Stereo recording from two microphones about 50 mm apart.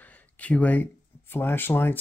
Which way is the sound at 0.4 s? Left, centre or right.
Left.